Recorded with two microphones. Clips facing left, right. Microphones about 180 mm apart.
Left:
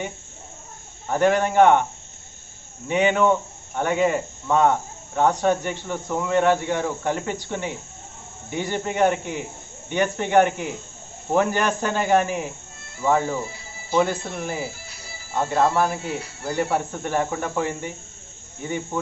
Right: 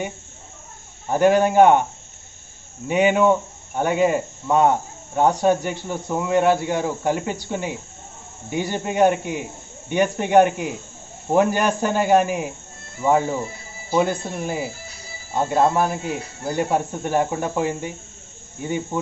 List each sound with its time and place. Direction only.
1.0 s speech: 10° right (ahead or behind)
2.9 s speech: 10° right (ahead or behind)